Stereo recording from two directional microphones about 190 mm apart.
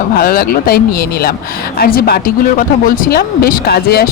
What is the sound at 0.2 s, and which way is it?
Speech, 50° left (ahead or behind).